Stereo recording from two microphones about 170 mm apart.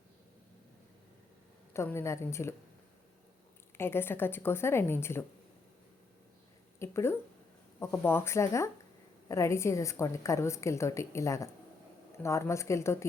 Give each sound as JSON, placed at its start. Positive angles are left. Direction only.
{"t": 1.7, "sound": "a woman's voice", "side_deg": 15}
{"t": 3.8, "sound": "a woman's voice", "side_deg": 15}
{"t": 6.7, "sound": "a woman's voice", "side_deg": 15}